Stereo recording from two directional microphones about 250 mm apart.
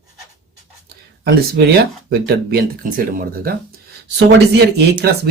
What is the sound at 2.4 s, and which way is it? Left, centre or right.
Speech, right.